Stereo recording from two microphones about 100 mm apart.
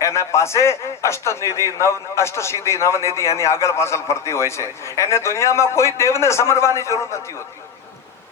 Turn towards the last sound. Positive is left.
turn(degrees=30)  # may be behind; listen again after turning